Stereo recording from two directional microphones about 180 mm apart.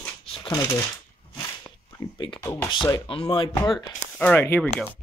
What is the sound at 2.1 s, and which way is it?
Speech, 25° left (ahead or behind).